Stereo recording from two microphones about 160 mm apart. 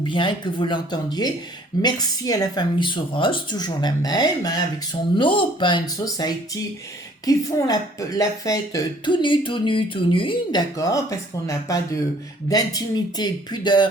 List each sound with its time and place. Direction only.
0.1 s speech: 30° left (ahead or behind)